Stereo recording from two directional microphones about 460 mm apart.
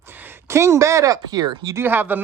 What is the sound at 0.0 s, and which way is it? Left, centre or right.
Speech, centre.